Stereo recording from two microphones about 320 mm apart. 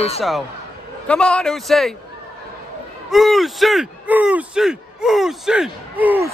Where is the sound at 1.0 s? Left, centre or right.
Centre.